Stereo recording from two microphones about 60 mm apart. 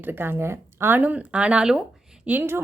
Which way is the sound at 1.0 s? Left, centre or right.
Right.